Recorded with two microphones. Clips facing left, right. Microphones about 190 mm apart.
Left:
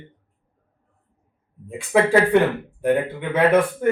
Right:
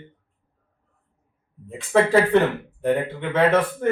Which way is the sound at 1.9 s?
10° left (ahead or behind).